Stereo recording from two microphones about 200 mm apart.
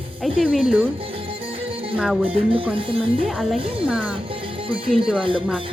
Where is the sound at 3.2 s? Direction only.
Centre (ahead or behind).